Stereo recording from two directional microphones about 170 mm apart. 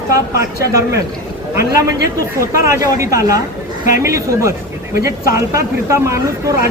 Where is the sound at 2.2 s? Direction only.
20° right (ahead or behind).